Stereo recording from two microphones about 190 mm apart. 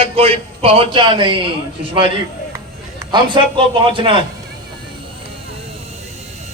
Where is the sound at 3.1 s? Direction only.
25° right (ahead or behind).